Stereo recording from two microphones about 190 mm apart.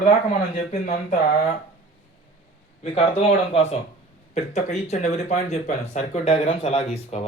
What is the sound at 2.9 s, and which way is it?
Speech, 30° left (ahead or behind).